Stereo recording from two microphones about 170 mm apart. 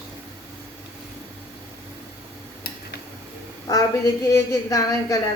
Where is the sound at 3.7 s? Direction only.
20° left (ahead or behind).